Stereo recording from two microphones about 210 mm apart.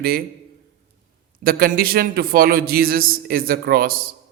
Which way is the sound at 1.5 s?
45° right (ahead or behind).